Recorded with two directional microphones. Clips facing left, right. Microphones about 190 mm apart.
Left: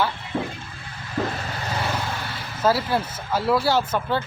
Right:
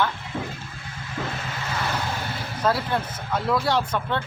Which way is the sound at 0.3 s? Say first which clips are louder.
Left 5 dB; 30° left (ahead or behind).